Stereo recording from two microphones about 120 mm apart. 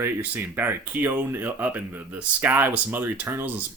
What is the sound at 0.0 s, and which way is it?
Speech, 15° right (ahead or behind).